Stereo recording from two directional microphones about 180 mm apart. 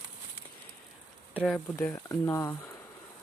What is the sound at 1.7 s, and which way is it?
Speech, 15° left (ahead or behind).